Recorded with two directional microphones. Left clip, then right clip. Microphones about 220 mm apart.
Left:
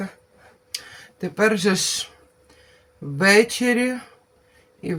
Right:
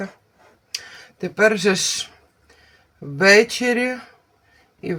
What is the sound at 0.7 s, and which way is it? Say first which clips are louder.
Speech: right 2 dB; 10° right (ahead or behind).